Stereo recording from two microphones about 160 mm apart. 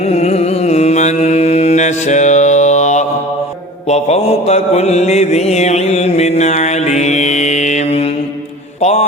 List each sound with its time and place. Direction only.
0.1 s mantra: 40° left (ahead or behind)